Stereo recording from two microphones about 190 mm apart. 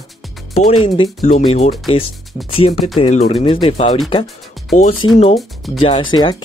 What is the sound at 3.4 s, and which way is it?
Speech, 25° left (ahead or behind).